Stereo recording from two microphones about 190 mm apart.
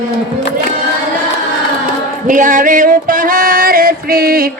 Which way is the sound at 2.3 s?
45° right (ahead or behind).